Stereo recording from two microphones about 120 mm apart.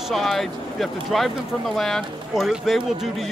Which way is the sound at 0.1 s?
Centre (ahead or behind).